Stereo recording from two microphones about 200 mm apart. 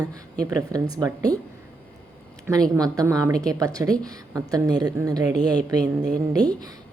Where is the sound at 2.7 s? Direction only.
15° right (ahead or behind).